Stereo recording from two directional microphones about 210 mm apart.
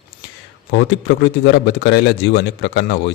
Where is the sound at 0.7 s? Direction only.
55° left (ahead or behind).